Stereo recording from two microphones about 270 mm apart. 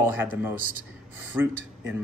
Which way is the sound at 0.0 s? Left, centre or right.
Centre.